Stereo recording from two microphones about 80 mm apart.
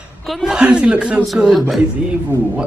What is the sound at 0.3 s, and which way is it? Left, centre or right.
Speech, centre.